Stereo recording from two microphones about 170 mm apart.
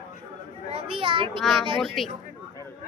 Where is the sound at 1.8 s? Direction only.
Centre (ahead or behind).